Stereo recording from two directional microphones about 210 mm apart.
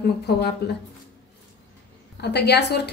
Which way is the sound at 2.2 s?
50° left (ahead or behind).